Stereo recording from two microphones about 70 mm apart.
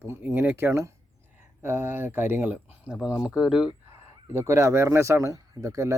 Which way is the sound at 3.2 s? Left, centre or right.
Centre.